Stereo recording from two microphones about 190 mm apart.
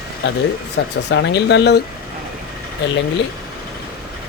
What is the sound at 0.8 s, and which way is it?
Speech, 70° left (ahead or behind).